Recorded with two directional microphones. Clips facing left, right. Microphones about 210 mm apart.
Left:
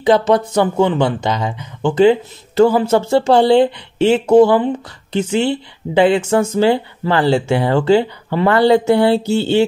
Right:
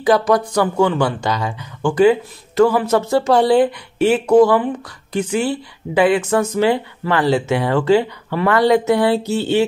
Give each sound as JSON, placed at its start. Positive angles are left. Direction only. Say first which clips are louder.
{"t": 0.0, "sound": "speech", "louder": "left 2 dB", "side_deg": 25}